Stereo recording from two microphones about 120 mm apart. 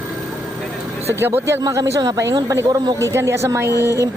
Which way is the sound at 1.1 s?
20° right (ahead or behind).